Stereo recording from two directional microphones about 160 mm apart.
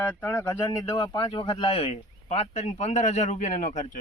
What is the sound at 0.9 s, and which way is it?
Speech, 30° left (ahead or behind).